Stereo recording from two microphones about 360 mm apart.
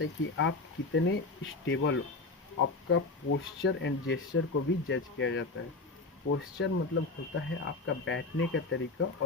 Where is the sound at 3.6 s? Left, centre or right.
Left.